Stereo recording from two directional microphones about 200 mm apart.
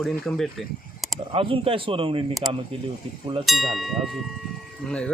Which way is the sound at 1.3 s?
25° right (ahead or behind).